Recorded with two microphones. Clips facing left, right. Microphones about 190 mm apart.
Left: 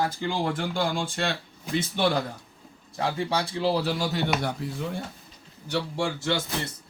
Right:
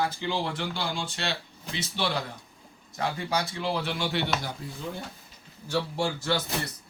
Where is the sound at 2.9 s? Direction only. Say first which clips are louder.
Left 2 dB; 30° left (ahead or behind).